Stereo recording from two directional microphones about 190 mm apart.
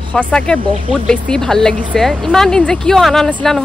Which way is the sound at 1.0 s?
5° left (ahead or behind).